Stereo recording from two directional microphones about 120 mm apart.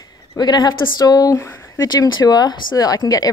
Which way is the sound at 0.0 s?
35° left (ahead or behind).